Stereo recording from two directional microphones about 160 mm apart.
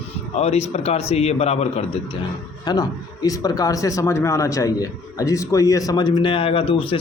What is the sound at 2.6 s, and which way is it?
Speech, 25° left (ahead or behind).